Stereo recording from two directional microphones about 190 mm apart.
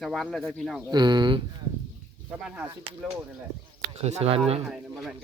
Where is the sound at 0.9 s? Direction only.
25° right (ahead or behind).